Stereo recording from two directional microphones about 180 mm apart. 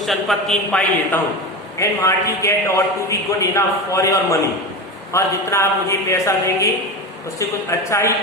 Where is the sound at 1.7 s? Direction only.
15° left (ahead or behind).